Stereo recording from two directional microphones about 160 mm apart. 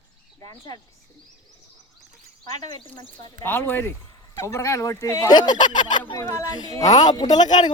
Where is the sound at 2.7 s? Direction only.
30° left (ahead or behind).